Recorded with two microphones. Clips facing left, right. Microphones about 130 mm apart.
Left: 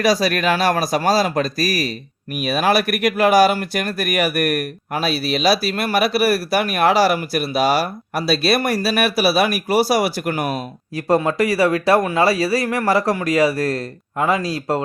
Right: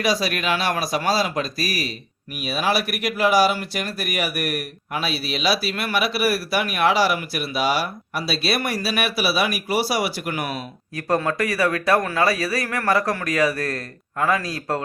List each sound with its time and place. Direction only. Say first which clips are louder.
0.0 s speech: left 5 dB; 40° left (ahead or behind)
11.2 s speech: left 5 dB; 25° left (ahead or behind)